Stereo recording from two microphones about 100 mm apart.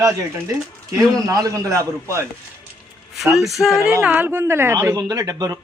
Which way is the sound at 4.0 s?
15° right (ahead or behind).